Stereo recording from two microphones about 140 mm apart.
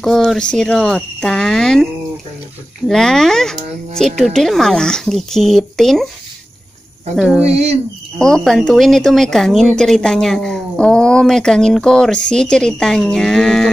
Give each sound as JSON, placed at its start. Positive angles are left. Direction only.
{"t": 0.0, "sound": "speech", "side_deg": 0}
{"t": 2.9, "sound": "a woman's voice", "side_deg": 5}
{"t": 7.2, "sound": "a woman's voice", "side_deg": -5}